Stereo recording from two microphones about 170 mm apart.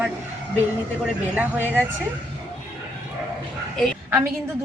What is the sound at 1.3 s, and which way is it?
Speech, 10° right (ahead or behind).